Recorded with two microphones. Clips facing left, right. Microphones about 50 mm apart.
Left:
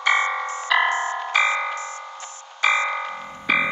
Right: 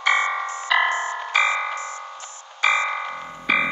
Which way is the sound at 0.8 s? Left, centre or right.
Left.